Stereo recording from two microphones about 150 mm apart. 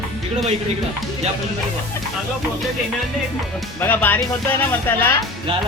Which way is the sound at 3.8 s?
10° left (ahead or behind).